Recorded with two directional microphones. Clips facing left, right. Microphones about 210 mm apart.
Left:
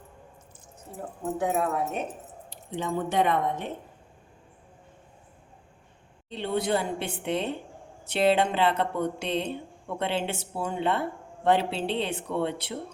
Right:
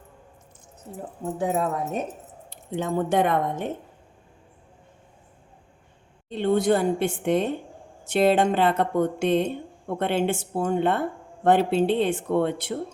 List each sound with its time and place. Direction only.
1.4 s speech: 30° right (ahead or behind)
2.5 s speech: 50° right (ahead or behind)
6.2 s speech: 50° right (ahead or behind)